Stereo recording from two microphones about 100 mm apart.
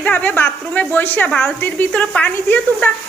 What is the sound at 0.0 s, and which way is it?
A woman's voice, 15° left (ahead or behind).